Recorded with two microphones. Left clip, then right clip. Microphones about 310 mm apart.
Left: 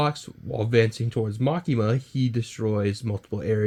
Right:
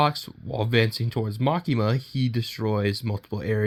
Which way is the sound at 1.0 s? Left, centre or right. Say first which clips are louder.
Even; right.